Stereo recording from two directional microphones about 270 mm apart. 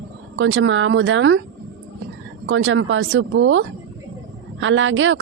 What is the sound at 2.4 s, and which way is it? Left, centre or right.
Speech, right.